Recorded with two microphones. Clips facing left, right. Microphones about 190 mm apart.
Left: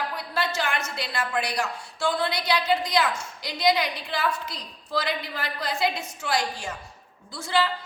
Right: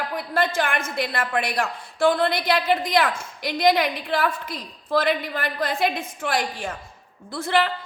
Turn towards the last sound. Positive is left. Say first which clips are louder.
# right 3 dB
turn(degrees=-60)  # may be behind; listen again after turning